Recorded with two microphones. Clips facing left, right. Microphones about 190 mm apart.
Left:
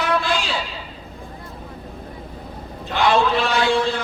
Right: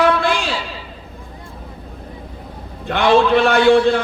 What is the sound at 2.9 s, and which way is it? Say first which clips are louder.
A man's voice: right 5 dB; 60° right (ahead or behind).